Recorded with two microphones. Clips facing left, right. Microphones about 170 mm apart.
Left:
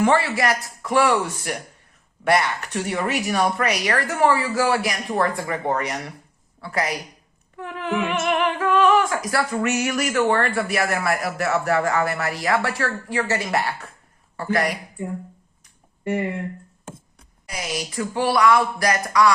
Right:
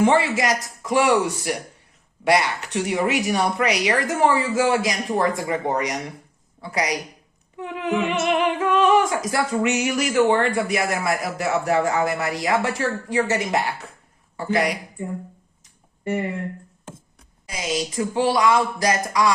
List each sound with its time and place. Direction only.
0.0 s humming: 20° right (ahead or behind)
17.5 s speech: 20° right (ahead or behind)